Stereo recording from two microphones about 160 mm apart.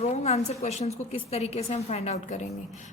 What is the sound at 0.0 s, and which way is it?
A woman's voice, 40° left (ahead or behind).